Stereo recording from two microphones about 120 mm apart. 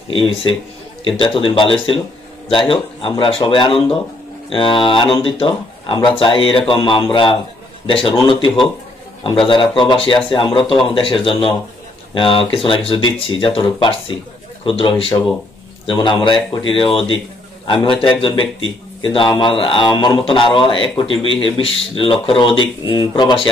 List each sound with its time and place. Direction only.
0.1 s a man's voice: 50° left (ahead or behind)
9.5 s a man's voice: 45° left (ahead or behind)